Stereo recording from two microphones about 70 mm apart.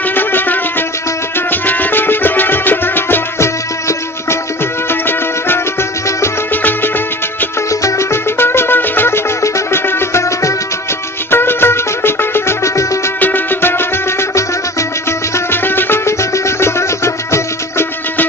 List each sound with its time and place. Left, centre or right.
0.1 s music: left
7.7 s music: left
11.3 s music: left
13.1 s music: left
15.4 s music: left